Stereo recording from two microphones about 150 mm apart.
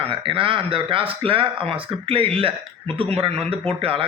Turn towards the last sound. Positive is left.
turn(degrees=-40)  # may be behind; listen again after turning